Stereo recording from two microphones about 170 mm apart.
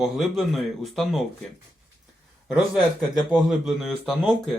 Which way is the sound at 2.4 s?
5° right (ahead or behind).